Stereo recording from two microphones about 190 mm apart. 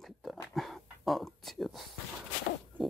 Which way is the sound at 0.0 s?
Centre (ahead or behind).